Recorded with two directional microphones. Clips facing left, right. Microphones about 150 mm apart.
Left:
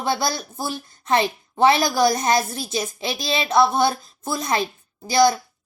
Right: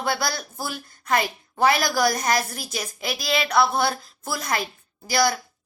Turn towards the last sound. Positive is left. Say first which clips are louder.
# left 5 dB
turn(degrees=20)  # may be behind; listen again after turning